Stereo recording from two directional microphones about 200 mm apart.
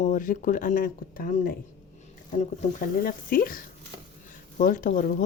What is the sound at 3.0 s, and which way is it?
Speech, 45° left (ahead or behind).